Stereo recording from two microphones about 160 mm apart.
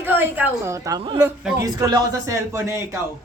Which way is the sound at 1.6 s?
25° right (ahead or behind).